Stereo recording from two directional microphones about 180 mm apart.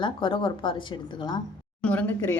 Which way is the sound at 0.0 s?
25° left (ahead or behind).